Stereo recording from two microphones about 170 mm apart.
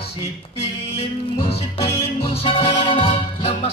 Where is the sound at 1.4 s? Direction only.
30° left (ahead or behind).